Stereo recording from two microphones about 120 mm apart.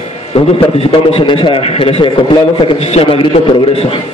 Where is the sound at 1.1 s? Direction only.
45° left (ahead or behind).